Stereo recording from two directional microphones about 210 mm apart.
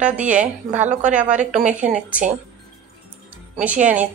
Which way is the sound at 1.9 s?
5° right (ahead or behind).